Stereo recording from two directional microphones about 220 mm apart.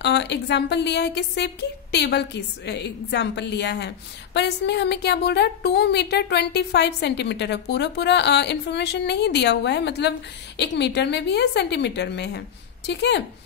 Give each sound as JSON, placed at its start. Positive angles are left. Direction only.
{"t": 0.0, "sound": "a woman's voice", "side_deg": 50}